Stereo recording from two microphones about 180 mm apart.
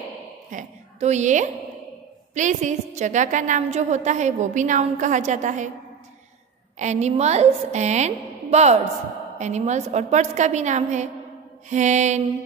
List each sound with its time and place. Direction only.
0.5 s a woman's voice: 40° right (ahead or behind)
6.8 s a woman's voice: 40° right (ahead or behind)